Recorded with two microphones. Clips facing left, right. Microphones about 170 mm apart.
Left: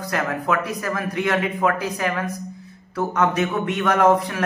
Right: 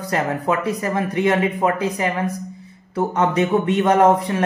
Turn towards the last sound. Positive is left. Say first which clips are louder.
# right 2 dB
turn(degrees=-25)  # may be behind; listen again after turning